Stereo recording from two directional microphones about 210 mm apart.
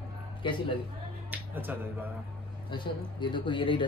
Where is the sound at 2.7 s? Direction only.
20° left (ahead or behind).